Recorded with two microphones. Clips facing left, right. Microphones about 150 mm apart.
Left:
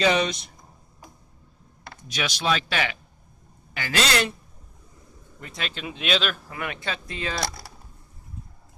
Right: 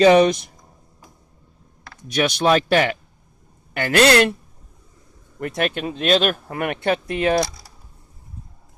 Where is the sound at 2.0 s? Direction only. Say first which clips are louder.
Right 8 dB; 55° right (ahead or behind).